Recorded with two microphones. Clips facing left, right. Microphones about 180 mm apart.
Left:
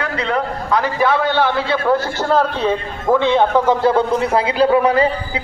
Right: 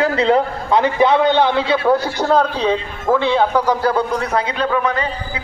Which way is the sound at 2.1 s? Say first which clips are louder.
Right 1 dB; 5° left (ahead or behind).